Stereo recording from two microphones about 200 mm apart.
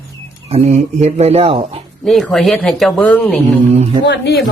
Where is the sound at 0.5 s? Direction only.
35° right (ahead or behind).